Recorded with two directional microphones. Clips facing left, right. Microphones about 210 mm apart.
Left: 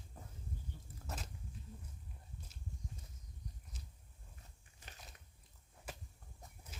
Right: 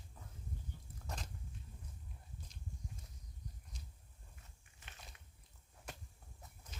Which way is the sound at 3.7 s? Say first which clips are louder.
Even; 5° left (ahead or behind).